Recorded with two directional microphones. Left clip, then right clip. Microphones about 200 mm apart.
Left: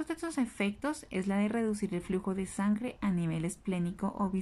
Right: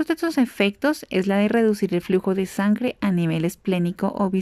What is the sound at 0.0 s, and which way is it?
Speech, 45° right (ahead or behind).